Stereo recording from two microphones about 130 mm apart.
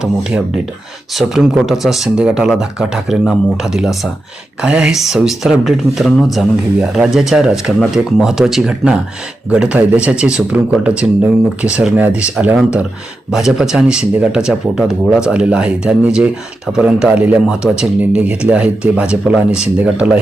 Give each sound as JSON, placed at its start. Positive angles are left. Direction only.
{"t": 0.0, "sound": "a man's voice", "side_deg": -5}